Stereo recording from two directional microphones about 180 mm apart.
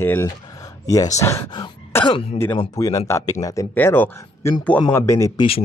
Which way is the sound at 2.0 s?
30° left (ahead or behind).